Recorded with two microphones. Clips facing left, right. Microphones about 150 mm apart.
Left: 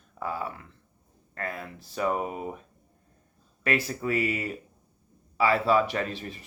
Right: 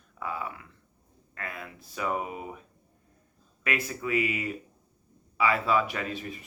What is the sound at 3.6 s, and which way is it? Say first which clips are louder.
Speech: left 4 dB; 35° left (ahead or behind).